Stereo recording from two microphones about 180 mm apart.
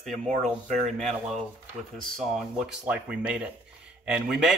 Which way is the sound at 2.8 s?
5° right (ahead or behind).